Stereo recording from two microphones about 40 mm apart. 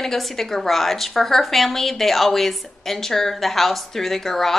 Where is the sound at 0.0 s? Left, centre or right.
Centre.